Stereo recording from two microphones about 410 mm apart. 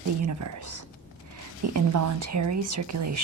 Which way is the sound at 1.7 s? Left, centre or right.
Right.